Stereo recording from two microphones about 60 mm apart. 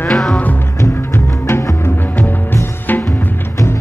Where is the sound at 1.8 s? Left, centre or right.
Left.